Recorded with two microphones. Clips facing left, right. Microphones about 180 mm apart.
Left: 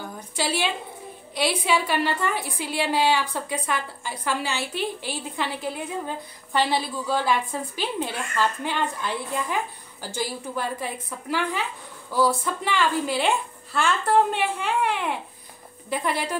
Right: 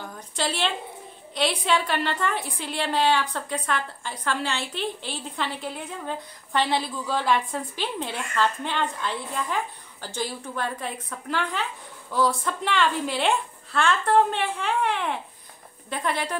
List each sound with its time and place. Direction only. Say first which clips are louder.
0.4 s a woman's voice: left 1 dB; 5° left (ahead or behind)